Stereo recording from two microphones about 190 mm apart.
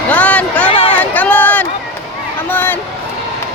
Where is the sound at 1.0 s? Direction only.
10° left (ahead or behind).